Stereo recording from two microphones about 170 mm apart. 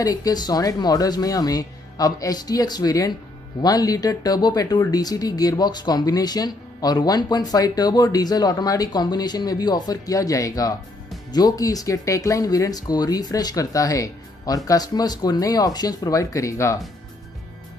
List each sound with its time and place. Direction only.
0.0 s speech: 20° left (ahead or behind)